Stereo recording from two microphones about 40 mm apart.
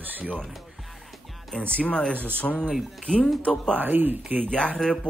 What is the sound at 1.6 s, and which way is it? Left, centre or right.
Speech, left.